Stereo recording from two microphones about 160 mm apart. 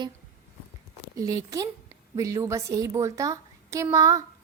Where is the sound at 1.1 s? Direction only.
20° right (ahead or behind).